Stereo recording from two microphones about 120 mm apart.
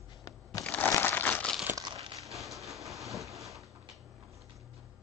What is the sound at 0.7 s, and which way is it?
Crumpling, 15° left (ahead or behind).